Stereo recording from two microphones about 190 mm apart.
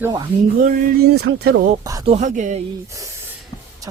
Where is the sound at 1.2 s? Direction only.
55° right (ahead or behind).